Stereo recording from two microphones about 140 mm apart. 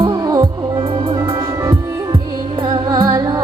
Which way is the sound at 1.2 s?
25° right (ahead or behind).